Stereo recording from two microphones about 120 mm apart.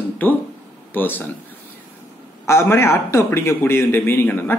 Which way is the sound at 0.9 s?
15° left (ahead or behind).